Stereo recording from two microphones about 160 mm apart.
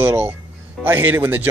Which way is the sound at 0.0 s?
15° right (ahead or behind).